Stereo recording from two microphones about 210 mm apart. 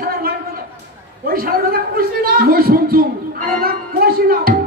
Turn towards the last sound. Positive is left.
turn(degrees=-45)  # may be behind; listen again after turning